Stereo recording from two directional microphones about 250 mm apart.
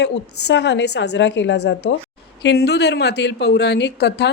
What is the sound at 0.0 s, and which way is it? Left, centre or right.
A woman's voice, left.